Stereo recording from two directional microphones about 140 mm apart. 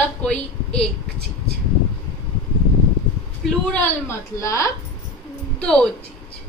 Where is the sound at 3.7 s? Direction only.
15° left (ahead or behind).